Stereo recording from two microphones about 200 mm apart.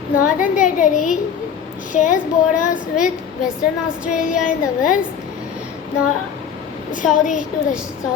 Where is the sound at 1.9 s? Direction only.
40° left (ahead or behind).